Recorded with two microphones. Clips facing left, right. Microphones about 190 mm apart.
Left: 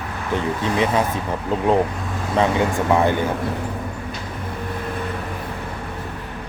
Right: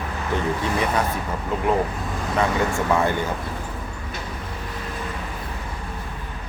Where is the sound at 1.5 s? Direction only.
30° left (ahead or behind).